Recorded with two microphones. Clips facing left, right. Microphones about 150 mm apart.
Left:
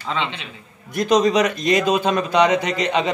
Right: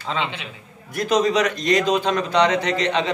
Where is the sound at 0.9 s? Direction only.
20° left (ahead or behind).